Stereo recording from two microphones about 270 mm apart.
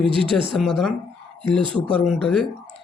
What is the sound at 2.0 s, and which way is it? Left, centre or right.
Speech, centre.